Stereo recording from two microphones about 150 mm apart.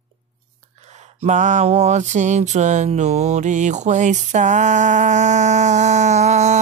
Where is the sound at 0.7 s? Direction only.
50° right (ahead or behind).